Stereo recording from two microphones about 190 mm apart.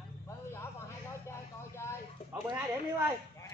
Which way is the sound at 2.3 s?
10° right (ahead or behind).